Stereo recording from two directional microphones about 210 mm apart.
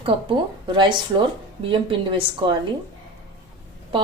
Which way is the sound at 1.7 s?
25° right (ahead or behind).